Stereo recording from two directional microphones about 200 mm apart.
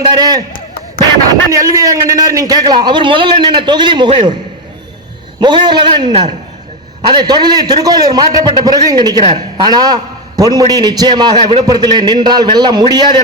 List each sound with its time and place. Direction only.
0.0 s a man's voice: 20° right (ahead or behind)
1.5 s a man's voice: 15° right (ahead or behind)
5.4 s a man's voice: 20° right (ahead or behind)